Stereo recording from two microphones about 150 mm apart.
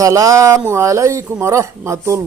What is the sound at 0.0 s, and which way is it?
A man's voice, 20° right (ahead or behind).